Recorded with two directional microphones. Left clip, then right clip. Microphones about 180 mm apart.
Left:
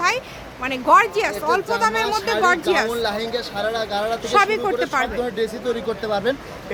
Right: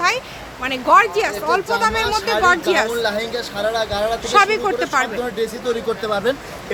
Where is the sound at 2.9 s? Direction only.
15° left (ahead or behind).